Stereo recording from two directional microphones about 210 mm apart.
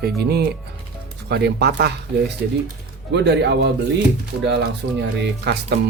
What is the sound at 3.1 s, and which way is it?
Speech, 55° right (ahead or behind).